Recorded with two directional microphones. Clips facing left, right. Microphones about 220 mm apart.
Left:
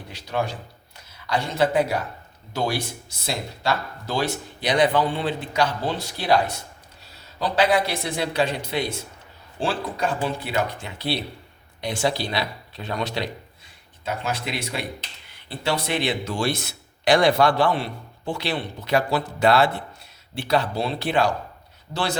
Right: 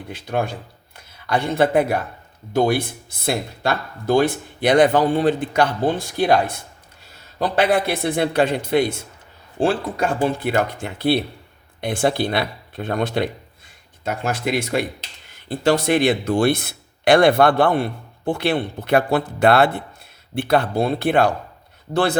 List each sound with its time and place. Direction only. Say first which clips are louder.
0.1 s speech: right 3 dB; 55° right (ahead or behind)